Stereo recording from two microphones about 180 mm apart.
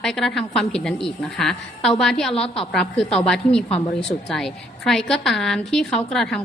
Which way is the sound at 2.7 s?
5° left (ahead or behind).